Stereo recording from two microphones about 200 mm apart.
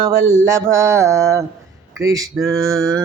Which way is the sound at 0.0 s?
15° right (ahead or behind).